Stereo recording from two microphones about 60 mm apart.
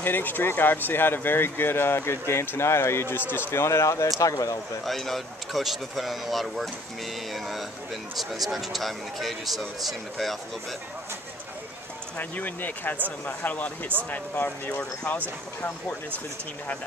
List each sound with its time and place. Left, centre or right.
0.0 s speech: left
3.6 s speech: left
4.2 s speech: left
4.8 s speech: centre
12.2 s speech: left